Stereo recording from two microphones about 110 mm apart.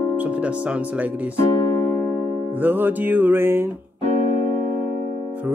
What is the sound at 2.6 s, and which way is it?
Music, 15° right (ahead or behind).